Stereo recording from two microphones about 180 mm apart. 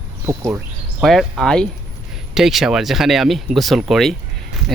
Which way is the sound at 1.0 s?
Centre (ahead or behind).